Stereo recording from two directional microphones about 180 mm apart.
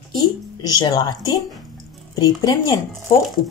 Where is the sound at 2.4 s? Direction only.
20° left (ahead or behind).